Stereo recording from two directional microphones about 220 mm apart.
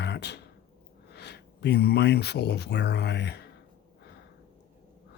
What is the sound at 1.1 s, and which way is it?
Speech, 50° left (ahead or behind).